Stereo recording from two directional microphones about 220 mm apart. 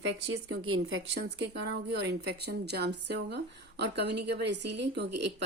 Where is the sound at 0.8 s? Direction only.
60° right (ahead or behind).